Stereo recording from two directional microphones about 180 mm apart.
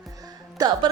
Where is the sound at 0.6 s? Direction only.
20° right (ahead or behind).